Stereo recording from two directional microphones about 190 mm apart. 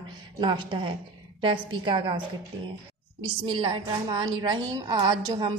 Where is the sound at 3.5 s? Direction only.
25° right (ahead or behind).